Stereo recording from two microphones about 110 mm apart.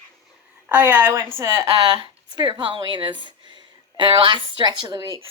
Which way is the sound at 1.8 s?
50° right (ahead or behind).